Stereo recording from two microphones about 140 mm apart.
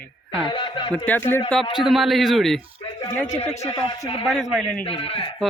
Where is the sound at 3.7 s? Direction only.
25° left (ahead or behind).